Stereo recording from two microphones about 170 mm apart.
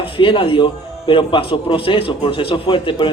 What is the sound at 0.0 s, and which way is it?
Speech, 30° left (ahead or behind).